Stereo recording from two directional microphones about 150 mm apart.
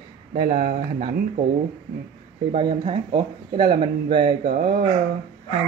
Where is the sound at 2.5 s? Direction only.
40° right (ahead or behind).